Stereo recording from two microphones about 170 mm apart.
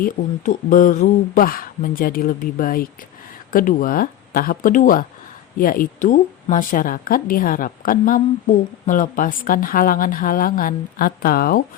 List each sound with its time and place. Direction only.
0.0 s speech: 50° left (ahead or behind)